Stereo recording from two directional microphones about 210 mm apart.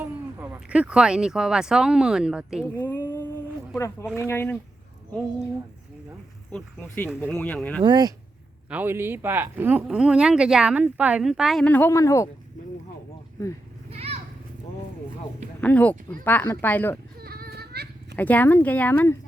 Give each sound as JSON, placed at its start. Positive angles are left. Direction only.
{"t": 0.0, "sound": "speech", "side_deg": -10}
{"t": 2.7, "sound": "speech", "side_deg": 10}
{"t": 6.5, "sound": "speech", "side_deg": 10}
{"t": 7.8, "sound": "speech", "side_deg": -20}
{"t": 8.7, "sound": "speech", "side_deg": -10}
{"t": 13.9, "sound": "children playing", "side_deg": -30}
{"t": 15.6, "sound": "speech", "side_deg": 5}
{"t": 17.2, "sound": "goat", "side_deg": -45}
{"t": 18.2, "sound": "speech", "side_deg": 10}